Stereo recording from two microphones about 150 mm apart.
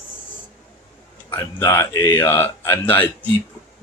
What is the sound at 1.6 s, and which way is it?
Speech, 20° left (ahead or behind).